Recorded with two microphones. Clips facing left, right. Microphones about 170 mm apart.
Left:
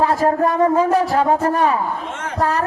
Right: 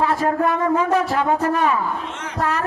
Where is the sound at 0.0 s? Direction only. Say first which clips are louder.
Left 3 dB; 35° left (ahead or behind).